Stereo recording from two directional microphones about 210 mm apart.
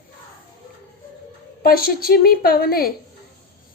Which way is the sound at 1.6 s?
45° left (ahead or behind).